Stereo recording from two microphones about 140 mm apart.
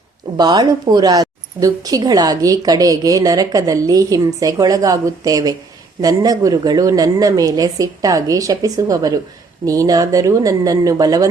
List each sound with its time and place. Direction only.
0.3 s speech: 30° right (ahead or behind)